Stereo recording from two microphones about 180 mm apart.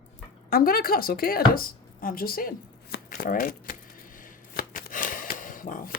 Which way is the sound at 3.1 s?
50° left (ahead or behind).